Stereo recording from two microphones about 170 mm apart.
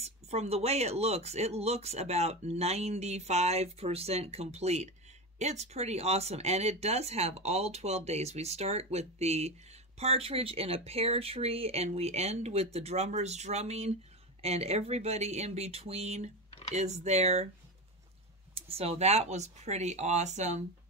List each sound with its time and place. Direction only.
0.0 s speech: 40° right (ahead or behind)
18.5 s speech: 35° right (ahead or behind)